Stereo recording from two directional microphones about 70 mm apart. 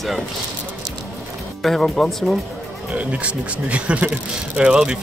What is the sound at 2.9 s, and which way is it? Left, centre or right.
Speech, centre.